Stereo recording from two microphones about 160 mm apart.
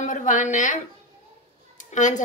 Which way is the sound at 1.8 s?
50° left (ahead or behind).